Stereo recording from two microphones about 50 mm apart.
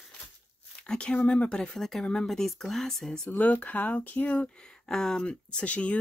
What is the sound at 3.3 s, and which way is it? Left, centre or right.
Speech, left.